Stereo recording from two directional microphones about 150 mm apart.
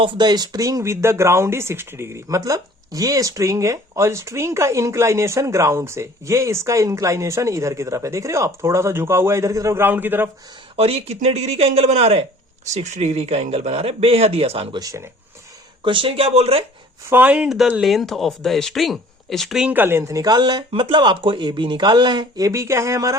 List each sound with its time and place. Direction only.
0.0 s speech: 30° right (ahead or behind); by 10.2 s 15° right (ahead or behind)
10.8 s speech: 40° right (ahead or behind)
14.8 s speech: 20° right (ahead or behind)
15.8 s speech: 35° right (ahead or behind)
17.1 s speech: 10° right (ahead or behind)